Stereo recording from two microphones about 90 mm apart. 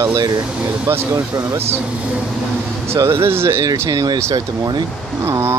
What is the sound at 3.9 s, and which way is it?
Speech, 50° right (ahead or behind).